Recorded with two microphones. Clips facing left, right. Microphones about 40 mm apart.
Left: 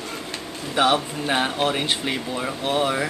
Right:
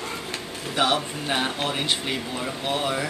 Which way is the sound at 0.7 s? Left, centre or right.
Centre.